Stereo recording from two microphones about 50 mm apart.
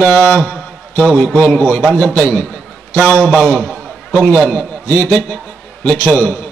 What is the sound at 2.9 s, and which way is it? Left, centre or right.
Speech, left.